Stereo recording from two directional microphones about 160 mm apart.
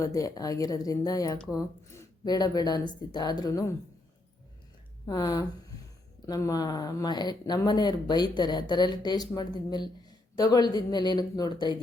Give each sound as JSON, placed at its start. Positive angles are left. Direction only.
{"t": 0.0, "sound": "speech", "side_deg": 20}
{"t": 5.0, "sound": "speech", "side_deg": 25}